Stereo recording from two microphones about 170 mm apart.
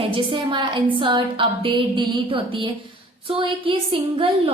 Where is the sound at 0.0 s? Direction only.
30° right (ahead or behind).